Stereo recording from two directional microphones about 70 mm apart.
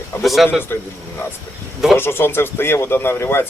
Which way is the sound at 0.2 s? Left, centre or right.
Centre.